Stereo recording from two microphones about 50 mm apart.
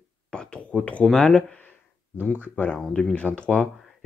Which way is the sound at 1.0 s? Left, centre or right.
Centre.